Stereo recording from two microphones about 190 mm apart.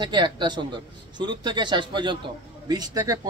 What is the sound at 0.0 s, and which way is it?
Speech, 25° right (ahead or behind).